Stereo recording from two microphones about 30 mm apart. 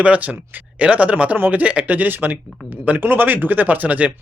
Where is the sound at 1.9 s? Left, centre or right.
Right.